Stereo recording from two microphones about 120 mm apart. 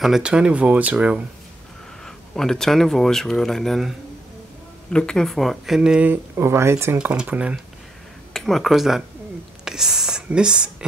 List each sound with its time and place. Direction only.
0.0 s speech: 5° right (ahead or behind)
2.0 s speech: 5° left (ahead or behind)
4.9 s speech: 5° left (ahead or behind); by 6.1 s 10° right (ahead or behind)
6.3 s speech: 20° right (ahead or behind)
7.0 s speech: 10° right (ahead or behind)
8.3 s speech: centre (ahead or behind)